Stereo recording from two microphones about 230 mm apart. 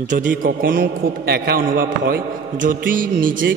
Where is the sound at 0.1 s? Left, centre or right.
Right.